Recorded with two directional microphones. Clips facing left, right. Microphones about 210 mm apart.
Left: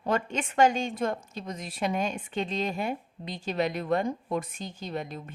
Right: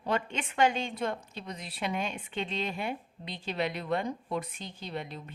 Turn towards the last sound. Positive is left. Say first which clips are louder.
# left 4 dB
turn(degrees=45)  # may be behind; listen again after turning